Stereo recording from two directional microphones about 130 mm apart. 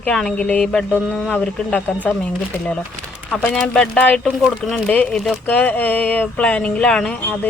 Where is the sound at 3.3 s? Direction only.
10° left (ahead or behind).